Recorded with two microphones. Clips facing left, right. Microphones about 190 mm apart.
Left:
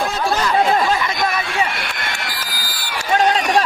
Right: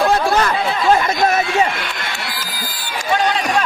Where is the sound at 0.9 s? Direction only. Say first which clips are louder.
Right 5 dB; 45° right (ahead or behind).